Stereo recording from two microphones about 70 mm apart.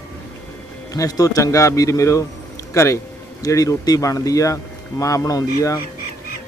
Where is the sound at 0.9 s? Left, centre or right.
Left.